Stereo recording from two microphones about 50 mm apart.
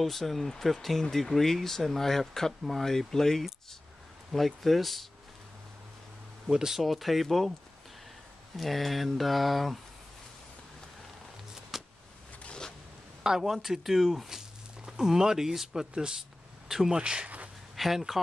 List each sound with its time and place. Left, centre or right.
0.0 s speech: centre
6.5 s speech: centre
6.8 s speech: centre
8.5 s speech: centre
11.7 s vehicle: centre
12.4 s zipper: centre
13.2 s speech: centre
17.0 s speech: centre
17.7 s speech: centre